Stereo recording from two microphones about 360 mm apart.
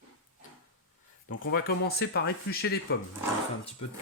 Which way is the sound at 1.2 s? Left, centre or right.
Left.